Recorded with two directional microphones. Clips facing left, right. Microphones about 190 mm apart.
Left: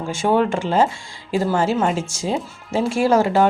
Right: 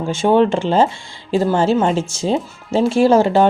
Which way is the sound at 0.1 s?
25° right (ahead or behind).